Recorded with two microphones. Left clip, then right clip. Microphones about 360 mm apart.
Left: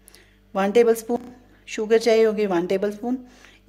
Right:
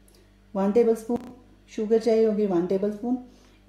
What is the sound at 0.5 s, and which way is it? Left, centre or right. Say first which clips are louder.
A woman's voice: left 4 dB; left.